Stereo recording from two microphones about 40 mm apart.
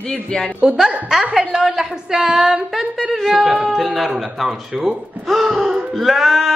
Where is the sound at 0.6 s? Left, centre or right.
Right.